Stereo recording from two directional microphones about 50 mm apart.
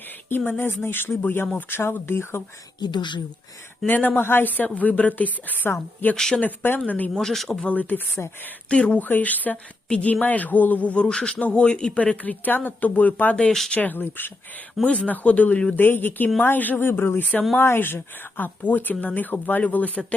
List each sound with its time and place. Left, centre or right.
0.3 s speech: left
3.8 s speech: left
4.2 s speech: left
6.1 s speech: centre
6.4 s speech: left
7.2 s speech: centre
7.7 s speech: left
8.7 s speech: left
9.0 s speech: left
11.1 s speech: centre; by 14.3 s left
14.8 s speech: left
15.7 s speech: left